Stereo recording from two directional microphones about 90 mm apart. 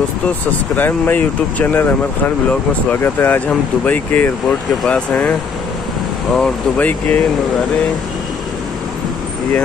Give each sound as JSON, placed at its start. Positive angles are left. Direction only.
{"t": 0.7, "sound": "speech", "side_deg": 20}
{"t": 6.3, "sound": "speech", "side_deg": 15}